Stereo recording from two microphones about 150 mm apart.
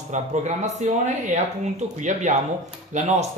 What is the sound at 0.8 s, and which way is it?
Speech, 50° right (ahead or behind).